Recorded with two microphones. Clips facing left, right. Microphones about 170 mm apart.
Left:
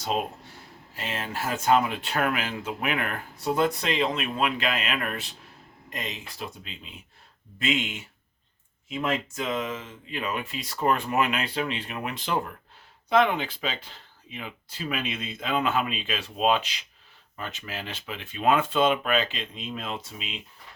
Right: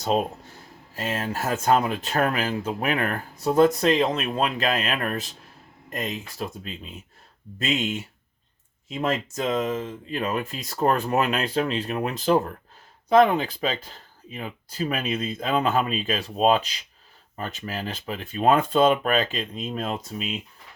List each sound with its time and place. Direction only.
0.1 s speech: 40° right (ahead or behind)